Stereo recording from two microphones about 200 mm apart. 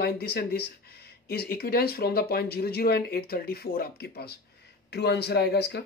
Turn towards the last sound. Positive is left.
turn(degrees=55)  # may be behind; listen again after turning